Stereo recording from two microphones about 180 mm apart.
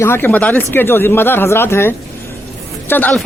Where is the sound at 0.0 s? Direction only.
10° left (ahead or behind).